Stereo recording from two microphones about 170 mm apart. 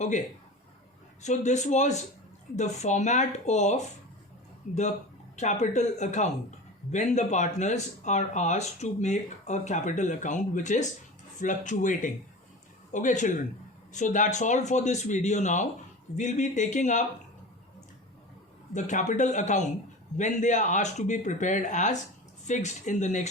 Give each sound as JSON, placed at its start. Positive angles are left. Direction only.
{"t": 1.2, "sound": "speech", "side_deg": 45}
{"t": 18.7, "sound": "speech", "side_deg": 45}